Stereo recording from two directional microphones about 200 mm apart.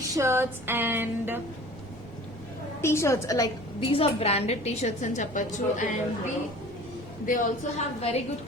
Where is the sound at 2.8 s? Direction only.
15° left (ahead or behind); by 5.9 s 40° left (ahead or behind).